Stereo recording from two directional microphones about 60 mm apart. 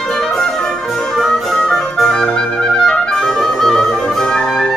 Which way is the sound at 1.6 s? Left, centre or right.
Centre.